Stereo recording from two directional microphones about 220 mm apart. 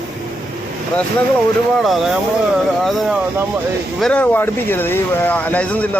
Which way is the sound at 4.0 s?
5° left (ahead or behind).